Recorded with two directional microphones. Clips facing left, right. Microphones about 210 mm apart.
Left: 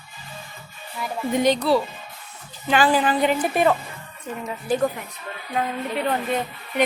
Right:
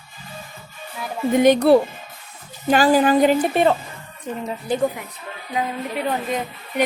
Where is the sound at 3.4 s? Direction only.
25° right (ahead or behind).